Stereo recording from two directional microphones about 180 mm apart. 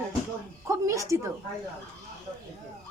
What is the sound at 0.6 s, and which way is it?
Speech, 15° right (ahead or behind).